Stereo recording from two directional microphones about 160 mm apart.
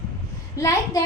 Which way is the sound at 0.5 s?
20° left (ahead or behind).